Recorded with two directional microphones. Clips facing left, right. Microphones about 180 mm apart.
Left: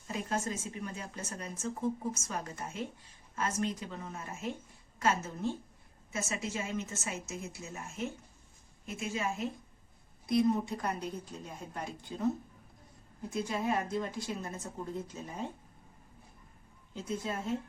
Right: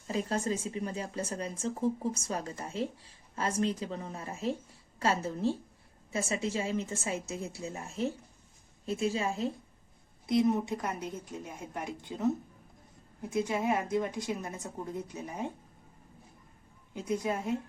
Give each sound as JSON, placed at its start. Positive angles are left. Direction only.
{"t": 0.1, "sound": "speech", "side_deg": -35}
{"t": 10.2, "sound": "a woman's voice", "side_deg": -20}
{"t": 13.3, "sound": "a woman's voice", "side_deg": -20}
{"t": 16.9, "sound": "a woman's voice", "side_deg": -15}